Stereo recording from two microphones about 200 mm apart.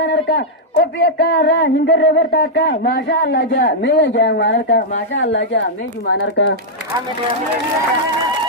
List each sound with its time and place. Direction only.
0.0 s speech: 55° left (ahead or behind)